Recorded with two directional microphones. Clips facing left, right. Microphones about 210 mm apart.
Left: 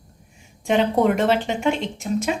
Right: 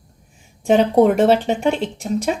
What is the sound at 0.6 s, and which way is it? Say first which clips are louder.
Speech: right 5 dB; 40° right (ahead or behind).